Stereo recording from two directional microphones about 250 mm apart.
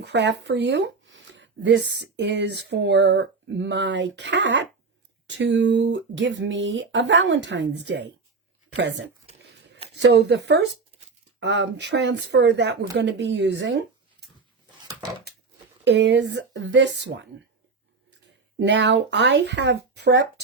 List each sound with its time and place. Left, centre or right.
0.0 s speech: right
15.8 s speech: right
18.6 s speech: right